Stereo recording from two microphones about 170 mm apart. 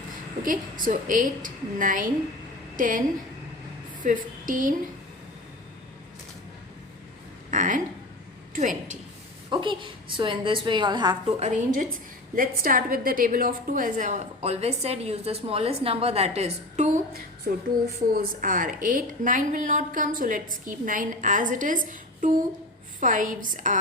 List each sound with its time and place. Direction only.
0.4 s a woman's voice: 55° right (ahead or behind)
4.0 s a woman's voice: 50° right (ahead or behind)
7.5 s a woman's voice: 50° right (ahead or behind)
9.5 s a woman's voice: 30° right (ahead or behind)
11.3 s a woman's voice: 45° right (ahead or behind)
18.1 s a woman's voice: 55° right (ahead or behind)